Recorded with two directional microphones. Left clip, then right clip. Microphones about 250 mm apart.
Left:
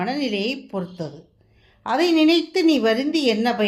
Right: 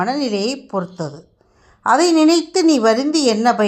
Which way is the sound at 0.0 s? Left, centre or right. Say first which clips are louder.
Right 5 dB; centre.